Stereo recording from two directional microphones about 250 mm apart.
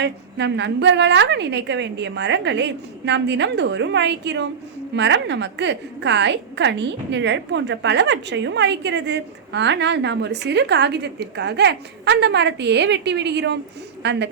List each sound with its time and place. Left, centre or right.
0.0 s a woman's voice: right